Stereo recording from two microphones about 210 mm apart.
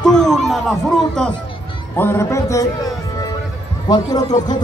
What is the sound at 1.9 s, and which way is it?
Speech, 10° left (ahead or behind).